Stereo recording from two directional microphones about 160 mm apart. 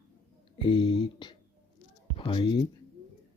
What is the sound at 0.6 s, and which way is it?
Speech, 30° left (ahead or behind).